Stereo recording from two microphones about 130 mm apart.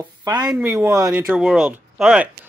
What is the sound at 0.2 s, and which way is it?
Speech, 30° right (ahead or behind).